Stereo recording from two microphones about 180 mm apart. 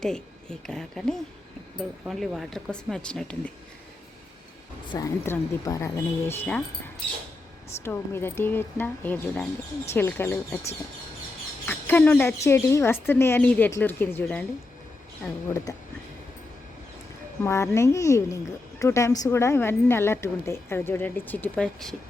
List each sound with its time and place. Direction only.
0.0 s speech: 5° left (ahead or behind)
4.9 s a woman's voice: 20° left (ahead or behind)
7.9 s a woman's voice: 15° left (ahead or behind)
11.6 s a woman's voice: 10° left (ahead or behind)
17.4 s a woman's voice: 15° left (ahead or behind)